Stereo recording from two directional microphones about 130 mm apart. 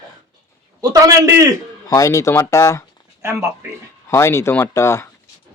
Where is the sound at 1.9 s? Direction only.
25° left (ahead or behind).